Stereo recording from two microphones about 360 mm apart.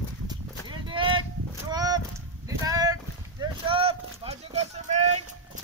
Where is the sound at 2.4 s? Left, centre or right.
Centre.